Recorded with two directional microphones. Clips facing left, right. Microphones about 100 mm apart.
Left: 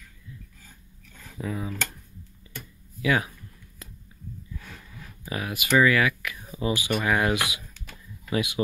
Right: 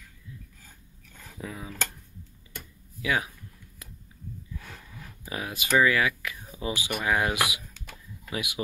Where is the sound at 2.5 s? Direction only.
10° right (ahead or behind).